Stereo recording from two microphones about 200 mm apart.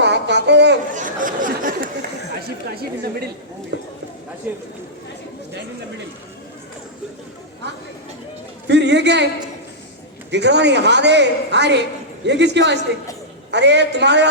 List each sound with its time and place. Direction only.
0.0 s a sound: 60° right (ahead or behind)
0.9 s chatter: 40° right (ahead or behind)
2.7 s a woman's voice: 50° right (ahead or behind)
3.7 s clip-clop: 60° right (ahead or behind)
4.4 s speech: 10° right (ahead or behind)
8.6 s a man's voice: 60° right (ahead or behind)
10.3 s a woman's voice: 60° right (ahead or behind)